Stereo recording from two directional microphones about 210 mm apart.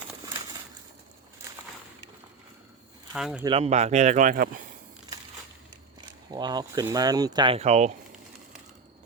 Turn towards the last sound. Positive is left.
turn(degrees=-30)  # may be behind; listen again after turning